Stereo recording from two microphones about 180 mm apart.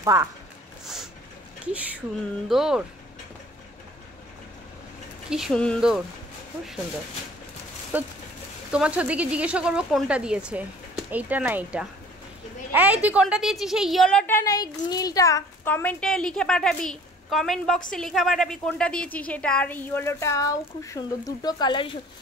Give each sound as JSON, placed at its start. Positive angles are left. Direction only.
{"t": 0.0, "sound": "speech", "side_deg": -15}
{"t": 1.6, "sound": "speech", "side_deg": -5}
{"t": 5.3, "sound": "a woman's voice", "side_deg": 0}
{"t": 7.9, "sound": "a woman's voice", "side_deg": -10}